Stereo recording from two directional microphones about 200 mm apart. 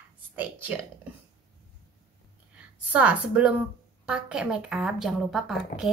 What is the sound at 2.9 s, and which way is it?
A woman's voice, 5° right (ahead or behind).